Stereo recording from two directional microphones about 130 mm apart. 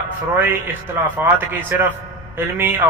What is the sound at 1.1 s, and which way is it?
A man's voice, 15° right (ahead or behind).